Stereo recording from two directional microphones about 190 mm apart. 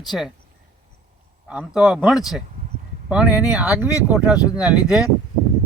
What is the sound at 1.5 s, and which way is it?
Speech, 5° right (ahead or behind).